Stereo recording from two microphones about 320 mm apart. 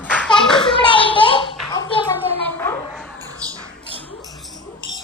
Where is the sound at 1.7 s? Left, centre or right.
Centre.